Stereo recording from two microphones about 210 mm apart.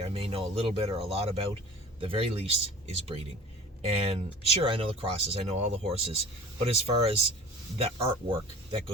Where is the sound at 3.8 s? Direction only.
30° right (ahead or behind).